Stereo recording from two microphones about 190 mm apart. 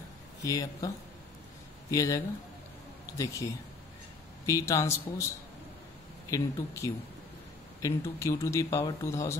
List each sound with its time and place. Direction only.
0.4 s speech: 15° left (ahead or behind)
4.5 s speech: 15° left (ahead or behind)
6.3 s speech: 15° left (ahead or behind)